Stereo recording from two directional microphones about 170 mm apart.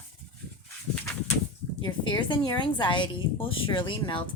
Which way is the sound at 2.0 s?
25° left (ahead or behind).